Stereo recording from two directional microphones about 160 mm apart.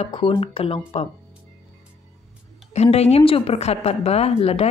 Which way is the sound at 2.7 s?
40° left (ahead or behind).